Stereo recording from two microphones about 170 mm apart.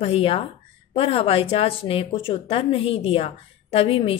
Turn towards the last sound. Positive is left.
turn(degrees=35)  # may be behind; listen again after turning